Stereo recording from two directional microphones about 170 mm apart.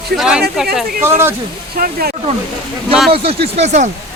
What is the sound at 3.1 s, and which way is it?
Speech, 35° right (ahead or behind).